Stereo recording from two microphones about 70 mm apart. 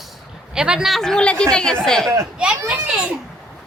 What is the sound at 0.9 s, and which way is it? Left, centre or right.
Speech, centre.